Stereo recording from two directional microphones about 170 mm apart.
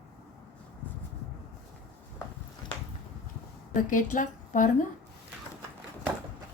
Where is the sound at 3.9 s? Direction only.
50° left (ahead or behind).